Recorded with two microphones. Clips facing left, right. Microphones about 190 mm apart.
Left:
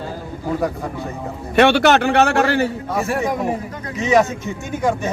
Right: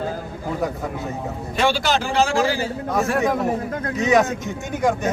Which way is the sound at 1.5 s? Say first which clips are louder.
Left 7 dB; 65° left (ahead or behind).